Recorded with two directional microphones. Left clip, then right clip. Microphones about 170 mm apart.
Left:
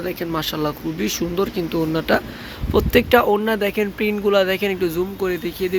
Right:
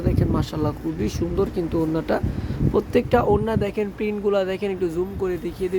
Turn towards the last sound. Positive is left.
turn(degrees=0)  # may be behind; listen again after turning